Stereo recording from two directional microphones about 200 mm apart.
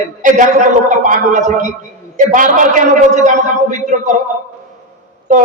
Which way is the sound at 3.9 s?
45° right (ahead or behind).